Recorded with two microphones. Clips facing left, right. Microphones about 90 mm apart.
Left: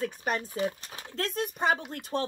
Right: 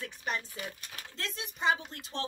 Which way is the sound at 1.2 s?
50° left (ahead or behind).